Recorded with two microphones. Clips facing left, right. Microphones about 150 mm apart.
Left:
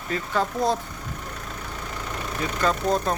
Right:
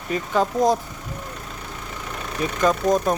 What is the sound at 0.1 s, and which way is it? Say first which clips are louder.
Speech: right 4 dB; 15° right (ahead or behind).